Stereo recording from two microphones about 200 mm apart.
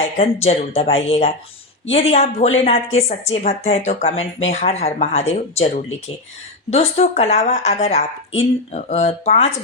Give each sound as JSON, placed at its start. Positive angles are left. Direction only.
{"t": 0.4, "sound": "speech", "side_deg": 30}